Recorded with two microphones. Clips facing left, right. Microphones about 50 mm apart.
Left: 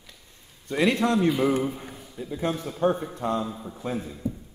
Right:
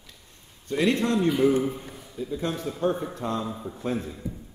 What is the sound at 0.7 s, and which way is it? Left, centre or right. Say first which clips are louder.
A man's voice: left 1 dB; left.